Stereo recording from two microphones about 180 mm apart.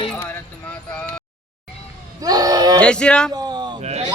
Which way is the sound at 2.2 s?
20° right (ahead or behind).